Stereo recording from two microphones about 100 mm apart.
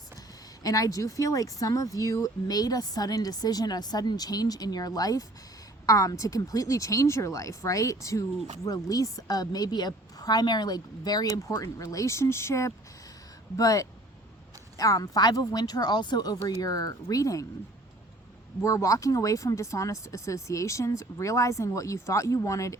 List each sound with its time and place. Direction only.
0.6 s speech: 35° left (ahead or behind)
11.4 s speech: 30° left (ahead or behind)
18.6 s speech: 30° left (ahead or behind)